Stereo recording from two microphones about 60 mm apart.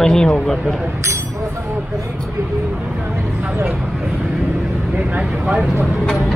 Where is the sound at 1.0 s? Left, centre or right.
Right.